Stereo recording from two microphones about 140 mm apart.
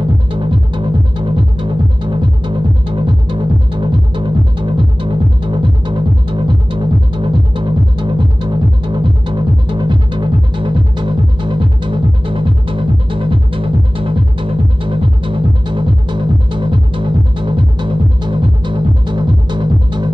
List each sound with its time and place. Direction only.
0.3 s music: 35° right (ahead or behind)